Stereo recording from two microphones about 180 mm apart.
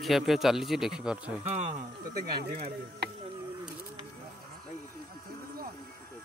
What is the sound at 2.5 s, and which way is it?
Chopping, 60° right (ahead or behind).